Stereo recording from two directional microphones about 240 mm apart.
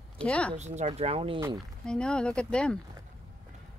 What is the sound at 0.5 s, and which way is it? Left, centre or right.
Speech, right.